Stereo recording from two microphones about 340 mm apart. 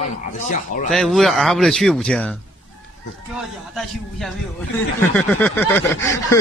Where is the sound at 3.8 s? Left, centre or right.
Centre.